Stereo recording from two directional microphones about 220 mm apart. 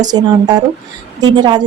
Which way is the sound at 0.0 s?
20° right (ahead or behind).